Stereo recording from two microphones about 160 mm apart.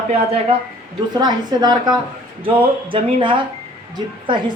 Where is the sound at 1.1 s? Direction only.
25° right (ahead or behind).